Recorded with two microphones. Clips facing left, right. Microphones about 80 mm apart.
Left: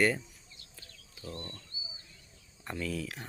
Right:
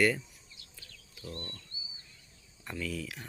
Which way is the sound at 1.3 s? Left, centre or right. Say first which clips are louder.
Left 1 dB; centre.